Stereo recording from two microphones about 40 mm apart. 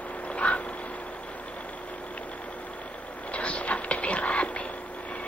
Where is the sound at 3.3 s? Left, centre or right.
Left.